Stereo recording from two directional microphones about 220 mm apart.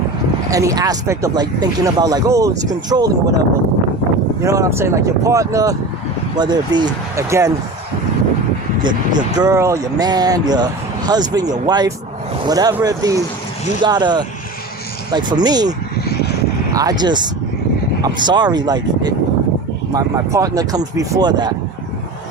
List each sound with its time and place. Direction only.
0.5 s speech: 15° right (ahead or behind)
4.4 s speech: 15° right (ahead or behind)
8.8 s speech: 20° right (ahead or behind)
16.7 s speech: 20° right (ahead or behind)